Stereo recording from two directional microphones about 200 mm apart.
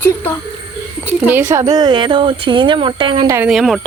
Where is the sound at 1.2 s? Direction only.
10° right (ahead or behind).